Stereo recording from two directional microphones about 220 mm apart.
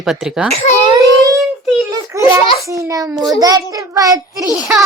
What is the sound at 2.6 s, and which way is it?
A child's voice, 15° right (ahead or behind).